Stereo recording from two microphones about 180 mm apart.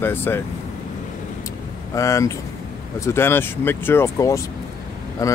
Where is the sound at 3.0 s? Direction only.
15° left (ahead or behind).